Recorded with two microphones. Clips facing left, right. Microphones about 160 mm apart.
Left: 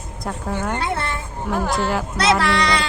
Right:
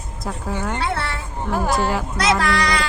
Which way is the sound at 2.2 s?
30° left (ahead or behind).